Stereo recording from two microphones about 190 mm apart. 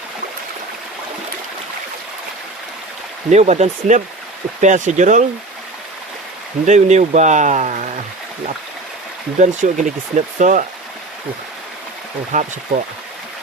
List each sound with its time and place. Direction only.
3.2 s speech: 35° right (ahead or behind)
6.7 s speech: 35° right (ahead or behind)
9.4 s speech: 40° right (ahead or behind)
12.3 s speech: 40° right (ahead or behind)